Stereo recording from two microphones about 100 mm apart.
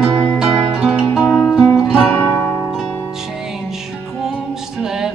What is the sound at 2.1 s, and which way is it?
Music, 20° left (ahead or behind).